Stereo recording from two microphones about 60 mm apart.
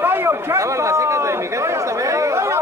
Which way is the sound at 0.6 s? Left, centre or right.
Right.